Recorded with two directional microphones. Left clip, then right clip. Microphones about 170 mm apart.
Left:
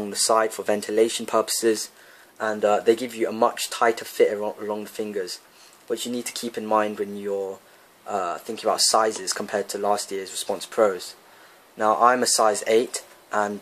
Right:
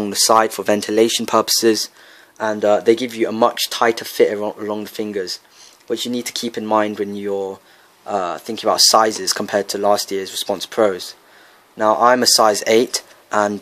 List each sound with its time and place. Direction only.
0.0 s speech: 45° right (ahead or behind)